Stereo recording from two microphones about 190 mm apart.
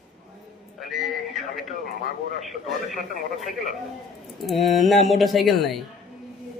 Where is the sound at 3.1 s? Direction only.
45° left (ahead or behind).